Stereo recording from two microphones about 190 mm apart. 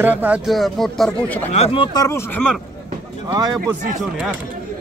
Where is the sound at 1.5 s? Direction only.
30° left (ahead or behind); by 2.6 s 5° left (ahead or behind).